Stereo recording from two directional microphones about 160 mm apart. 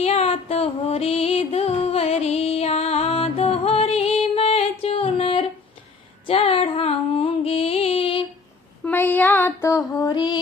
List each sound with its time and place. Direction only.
0.0 s music: 40° left (ahead or behind)
6.2 s a sound: 35° left (ahead or behind)
8.8 s female singing: 10° left (ahead or behind); by 10.4 s 25° left (ahead or behind)